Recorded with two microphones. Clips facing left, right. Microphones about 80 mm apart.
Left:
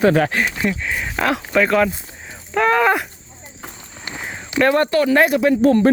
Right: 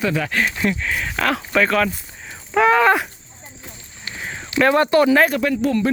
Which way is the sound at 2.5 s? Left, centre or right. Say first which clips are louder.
Right 1 dB; centre.